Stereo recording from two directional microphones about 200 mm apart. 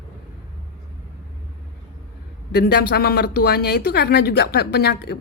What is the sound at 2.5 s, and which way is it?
Speech, 50° left (ahead or behind).